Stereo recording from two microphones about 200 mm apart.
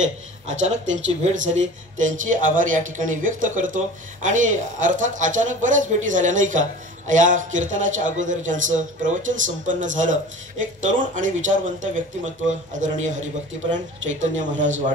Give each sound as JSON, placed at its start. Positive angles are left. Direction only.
{"t": 0.5, "sound": "speech", "side_deg": -35}
{"t": 12.4, "sound": "speech", "side_deg": -40}